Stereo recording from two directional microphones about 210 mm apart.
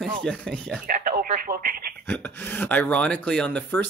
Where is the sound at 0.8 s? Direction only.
40° right (ahead or behind).